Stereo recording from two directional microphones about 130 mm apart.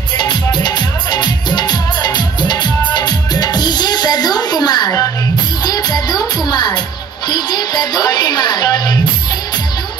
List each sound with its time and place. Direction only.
0.2 s music: 35° left (ahead or behind)